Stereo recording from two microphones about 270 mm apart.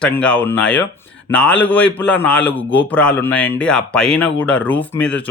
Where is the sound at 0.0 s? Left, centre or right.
Centre.